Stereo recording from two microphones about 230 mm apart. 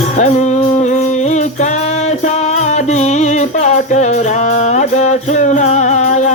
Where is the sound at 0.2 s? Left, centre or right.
Left.